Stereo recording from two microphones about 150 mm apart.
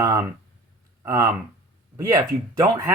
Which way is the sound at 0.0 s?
20° right (ahead or behind).